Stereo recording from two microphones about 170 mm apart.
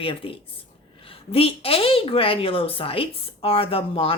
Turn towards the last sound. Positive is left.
turn(degrees=35)  # may be behind; listen again after turning